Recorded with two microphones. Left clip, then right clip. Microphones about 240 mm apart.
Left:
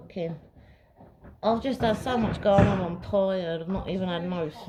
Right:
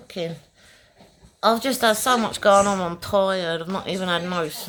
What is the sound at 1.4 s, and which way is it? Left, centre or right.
A woman's voice, right.